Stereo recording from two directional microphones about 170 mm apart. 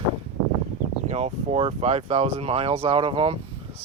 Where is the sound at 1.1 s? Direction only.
40° right (ahead or behind).